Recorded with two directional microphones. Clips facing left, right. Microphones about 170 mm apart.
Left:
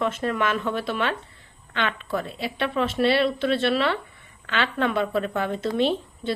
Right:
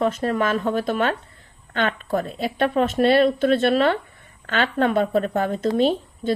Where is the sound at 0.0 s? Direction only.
40° right (ahead or behind).